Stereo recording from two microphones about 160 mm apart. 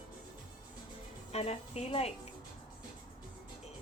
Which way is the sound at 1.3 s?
40° left (ahead or behind).